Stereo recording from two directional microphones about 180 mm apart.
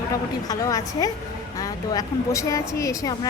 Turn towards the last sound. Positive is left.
turn(degrees=20)  # may be behind; listen again after turning